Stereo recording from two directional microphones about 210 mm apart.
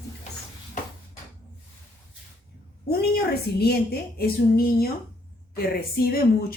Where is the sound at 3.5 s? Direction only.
50° left (ahead or behind).